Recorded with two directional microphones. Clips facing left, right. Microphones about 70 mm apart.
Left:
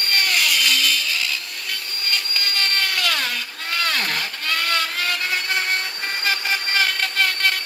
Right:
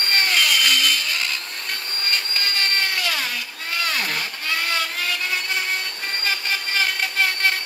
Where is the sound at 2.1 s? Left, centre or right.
Right.